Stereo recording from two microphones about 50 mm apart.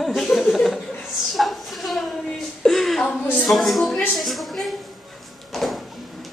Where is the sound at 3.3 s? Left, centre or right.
Centre.